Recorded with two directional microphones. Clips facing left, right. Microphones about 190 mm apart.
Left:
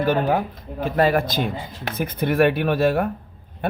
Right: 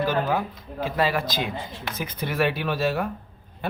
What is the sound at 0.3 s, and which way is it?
Speech, 50° left (ahead or behind).